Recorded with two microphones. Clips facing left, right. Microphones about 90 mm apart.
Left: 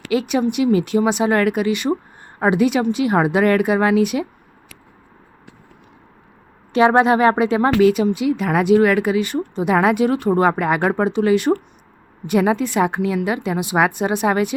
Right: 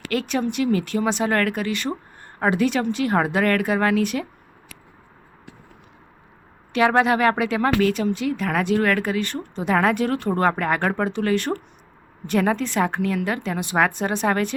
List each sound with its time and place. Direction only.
0.1 s speech: 10° left (ahead or behind)
6.7 s speech: 25° left (ahead or behind)
7.8 s speech: 10° left (ahead or behind)